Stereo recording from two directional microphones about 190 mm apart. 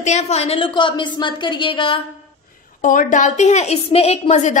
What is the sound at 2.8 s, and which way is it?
A woman's voice, 45° left (ahead or behind).